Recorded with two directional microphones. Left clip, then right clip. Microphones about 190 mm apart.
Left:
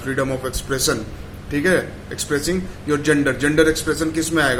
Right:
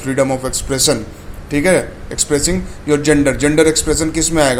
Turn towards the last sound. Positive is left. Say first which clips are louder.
# right 4 dB
turn(degrees=-25)  # may be behind; listen again after turning